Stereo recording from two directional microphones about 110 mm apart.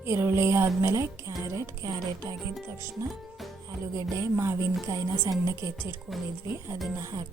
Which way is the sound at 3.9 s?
25° right (ahead or behind).